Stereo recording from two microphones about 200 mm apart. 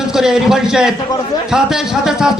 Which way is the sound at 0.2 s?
Centre (ahead or behind).